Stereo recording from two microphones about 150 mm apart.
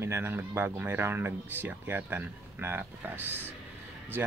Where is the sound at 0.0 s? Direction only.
15° right (ahead or behind).